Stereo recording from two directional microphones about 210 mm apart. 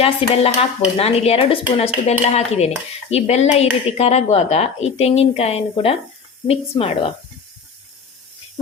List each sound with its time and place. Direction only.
0.0 s speech: 30° left (ahead or behind)